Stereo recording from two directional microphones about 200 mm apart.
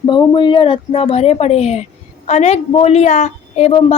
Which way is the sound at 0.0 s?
20° left (ahead or behind).